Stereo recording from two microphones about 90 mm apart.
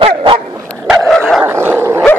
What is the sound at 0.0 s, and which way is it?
Dog, 80° right.